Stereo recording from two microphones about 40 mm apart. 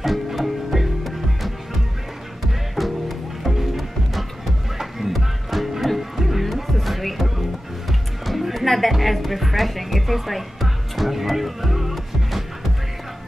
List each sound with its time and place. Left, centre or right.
0.0 s music: centre